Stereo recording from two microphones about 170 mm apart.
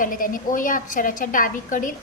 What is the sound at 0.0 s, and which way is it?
A woman's voice, 55° left (ahead or behind).